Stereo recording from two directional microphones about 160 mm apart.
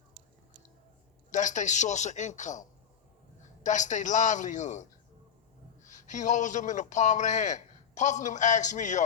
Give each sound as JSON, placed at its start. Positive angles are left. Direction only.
{"t": 1.3, "sound": "a man's voice", "side_deg": 50}